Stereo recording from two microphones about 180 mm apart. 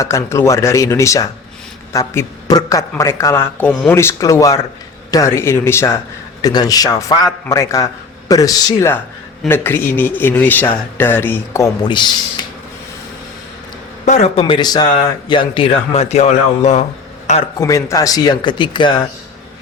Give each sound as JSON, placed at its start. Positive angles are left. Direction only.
{"t": 0.0, "sound": "speech", "side_deg": 15}
{"t": 14.0, "sound": "speech", "side_deg": 40}
{"t": 14.4, "sound": "speech", "side_deg": 25}
{"t": 17.6, "sound": "speech", "side_deg": 15}